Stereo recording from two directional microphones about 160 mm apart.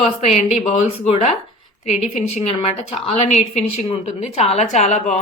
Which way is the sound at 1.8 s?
40° left (ahead or behind).